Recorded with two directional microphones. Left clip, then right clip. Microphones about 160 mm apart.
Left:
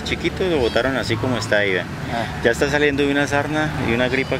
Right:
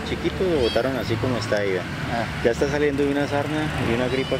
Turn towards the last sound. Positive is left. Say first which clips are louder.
# left 4 dB
turn(degrees=35)  # may be behind; listen again after turning